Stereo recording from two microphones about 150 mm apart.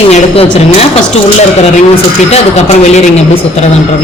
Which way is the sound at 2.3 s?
50° left (ahead or behind).